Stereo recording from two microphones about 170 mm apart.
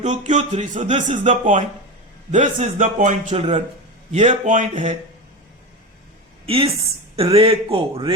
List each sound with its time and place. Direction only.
0.0 s speech: 45° right (ahead or behind)
6.4 s a woman's voice: 35° right (ahead or behind)